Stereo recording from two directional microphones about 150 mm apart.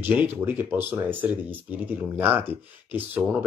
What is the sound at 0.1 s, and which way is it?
Speech, 10° right (ahead or behind).